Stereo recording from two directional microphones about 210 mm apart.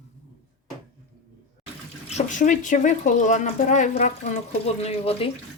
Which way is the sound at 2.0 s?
35° left (ahead or behind).